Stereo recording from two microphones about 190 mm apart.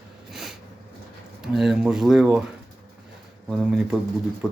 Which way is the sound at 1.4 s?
Centre (ahead or behind).